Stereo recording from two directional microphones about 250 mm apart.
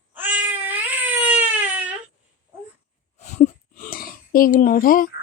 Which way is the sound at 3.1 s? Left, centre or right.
Left.